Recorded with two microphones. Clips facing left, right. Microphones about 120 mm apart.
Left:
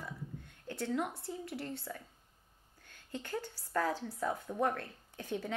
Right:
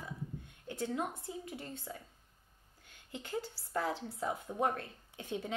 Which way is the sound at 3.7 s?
25° right (ahead or behind).